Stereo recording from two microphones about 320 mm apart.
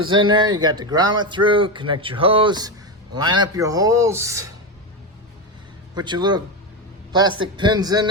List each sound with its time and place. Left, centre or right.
0.0 s speech: centre
5.9 s speech: centre